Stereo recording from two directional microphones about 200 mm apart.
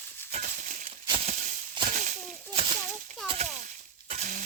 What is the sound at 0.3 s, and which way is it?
Crushing, 35° right (ahead or behind).